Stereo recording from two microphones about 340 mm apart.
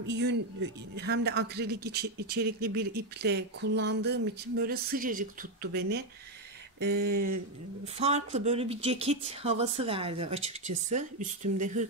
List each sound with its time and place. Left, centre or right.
0.0 s a man's voice: right
7.2 s a sound: right
7.8 s a man's voice: centre